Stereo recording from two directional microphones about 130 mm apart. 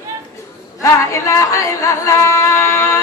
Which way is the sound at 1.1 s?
25° left (ahead or behind).